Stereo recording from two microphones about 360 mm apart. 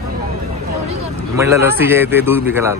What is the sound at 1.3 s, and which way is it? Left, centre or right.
Speech, centre.